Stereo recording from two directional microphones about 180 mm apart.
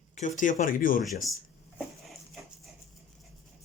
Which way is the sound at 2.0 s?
Centre (ahead or behind).